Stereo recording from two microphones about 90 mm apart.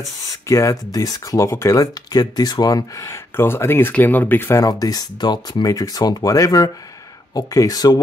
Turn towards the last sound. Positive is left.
turn(degrees=45)  # may be behind; listen again after turning